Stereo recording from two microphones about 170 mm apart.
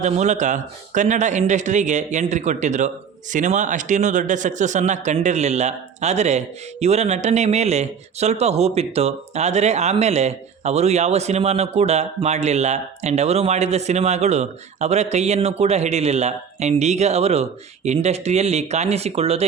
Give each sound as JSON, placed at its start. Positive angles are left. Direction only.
{"t": 0.0, "sound": "speech", "side_deg": -45}